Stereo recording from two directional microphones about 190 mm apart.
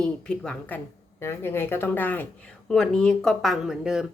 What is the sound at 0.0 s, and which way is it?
Speech, 5° left (ahead or behind).